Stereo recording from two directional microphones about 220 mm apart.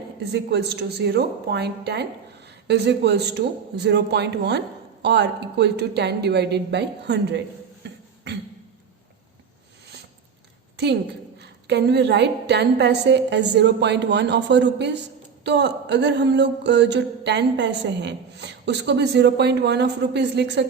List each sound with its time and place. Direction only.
0.3 s speech: 50° right (ahead or behind)
11.3 s speech: 50° right (ahead or behind)